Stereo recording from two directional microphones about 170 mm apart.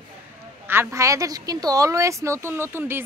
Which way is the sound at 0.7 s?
15° right (ahead or behind).